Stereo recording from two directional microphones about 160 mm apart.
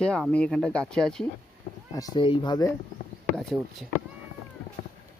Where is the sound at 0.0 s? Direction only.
5° left (ahead or behind).